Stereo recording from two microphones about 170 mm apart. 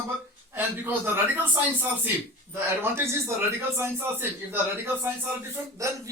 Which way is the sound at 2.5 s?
15° right (ahead or behind).